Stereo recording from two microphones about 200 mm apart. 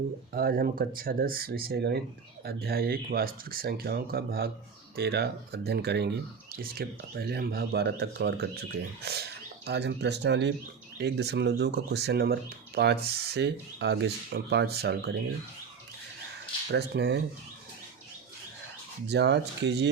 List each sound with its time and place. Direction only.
0.3 s speech: 45° right (ahead or behind)
16.7 s speech: 55° right (ahead or behind)
19.0 s speech: 55° right (ahead or behind)